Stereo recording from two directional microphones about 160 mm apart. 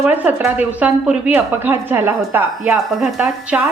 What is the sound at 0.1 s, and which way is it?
A woman's voice, 10° right (ahead or behind).